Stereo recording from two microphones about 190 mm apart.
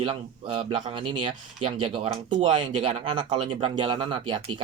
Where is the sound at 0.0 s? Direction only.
25° right (ahead or behind).